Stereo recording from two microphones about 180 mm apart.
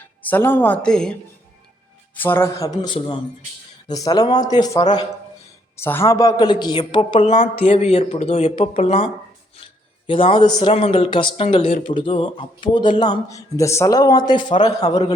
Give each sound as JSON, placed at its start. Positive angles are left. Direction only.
{"t": 0.3, "sound": "a woman's voice", "side_deg": 10}
{"t": 2.1, "sound": "speech", "side_deg": 10}
{"t": 7.3, "sound": "speech", "side_deg": 45}
{"t": 10.1, "sound": "speech", "side_deg": 30}
{"t": 14.8, "sound": "speech", "side_deg": 40}